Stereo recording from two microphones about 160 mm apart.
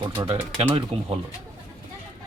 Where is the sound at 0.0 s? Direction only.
30° right (ahead or behind).